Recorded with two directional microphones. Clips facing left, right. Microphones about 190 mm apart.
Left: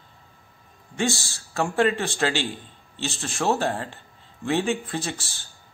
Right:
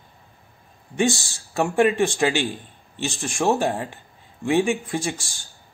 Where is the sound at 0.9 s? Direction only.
15° right (ahead or behind).